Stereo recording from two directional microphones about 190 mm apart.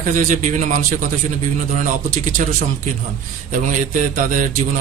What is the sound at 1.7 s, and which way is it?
Speech, 40° right (ahead or behind).